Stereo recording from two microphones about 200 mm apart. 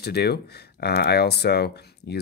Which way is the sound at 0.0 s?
55° left (ahead or behind).